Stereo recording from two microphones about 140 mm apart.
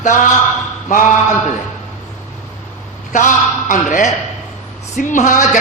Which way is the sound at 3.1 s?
65° left (ahead or behind).